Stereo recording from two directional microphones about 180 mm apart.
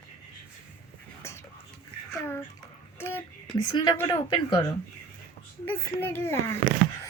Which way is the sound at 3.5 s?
25° left (ahead or behind).